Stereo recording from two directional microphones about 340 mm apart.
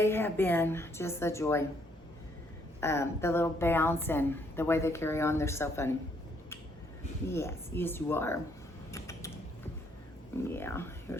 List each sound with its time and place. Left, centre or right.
0.0 s a woman's voice: centre
2.8 s a woman's voice: centre
7.3 s a woman's voice: centre
8.9 s creak: centre
10.5 s a woman's voice: centre